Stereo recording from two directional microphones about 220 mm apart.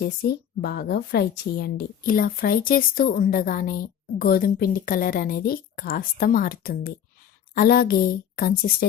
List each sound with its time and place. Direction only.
0.0 s a woman's voice: 45° left (ahead or behind)